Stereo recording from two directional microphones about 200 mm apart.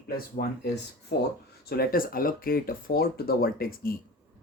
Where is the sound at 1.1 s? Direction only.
55° left (ahead or behind).